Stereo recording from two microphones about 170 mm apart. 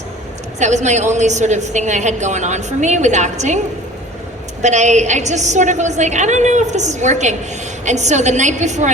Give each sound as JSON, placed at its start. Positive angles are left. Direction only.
{"t": 0.6, "sound": "a woman's voice", "side_deg": -45}
{"t": 4.6, "sound": "a woman's voice", "side_deg": -45}